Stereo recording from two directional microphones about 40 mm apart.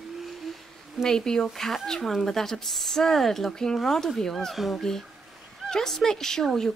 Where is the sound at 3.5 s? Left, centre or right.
Centre.